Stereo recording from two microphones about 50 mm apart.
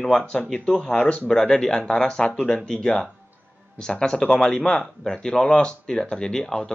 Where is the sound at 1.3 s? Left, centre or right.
Centre.